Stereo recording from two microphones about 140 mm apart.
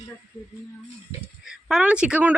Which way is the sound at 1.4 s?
5° right (ahead or behind).